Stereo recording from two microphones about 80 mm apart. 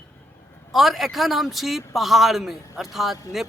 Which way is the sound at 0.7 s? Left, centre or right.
Centre.